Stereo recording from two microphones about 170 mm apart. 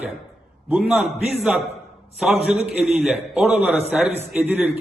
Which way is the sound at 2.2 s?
5° right (ahead or behind).